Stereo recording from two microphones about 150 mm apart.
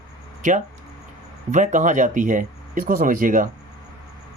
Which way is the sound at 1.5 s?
55° right (ahead or behind).